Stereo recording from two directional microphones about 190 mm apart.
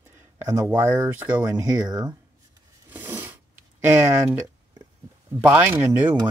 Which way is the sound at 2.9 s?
10° right (ahead or behind).